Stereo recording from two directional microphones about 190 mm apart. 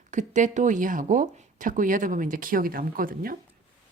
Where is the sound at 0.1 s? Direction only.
40° right (ahead or behind).